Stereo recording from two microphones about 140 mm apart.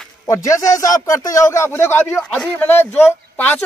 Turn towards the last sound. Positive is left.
turn(degrees=15)  # may be behind; listen again after turning